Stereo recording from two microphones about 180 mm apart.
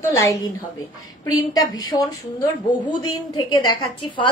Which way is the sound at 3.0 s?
20° left (ahead or behind).